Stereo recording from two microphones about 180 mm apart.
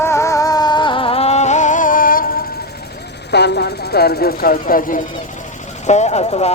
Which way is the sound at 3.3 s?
65° left (ahead or behind).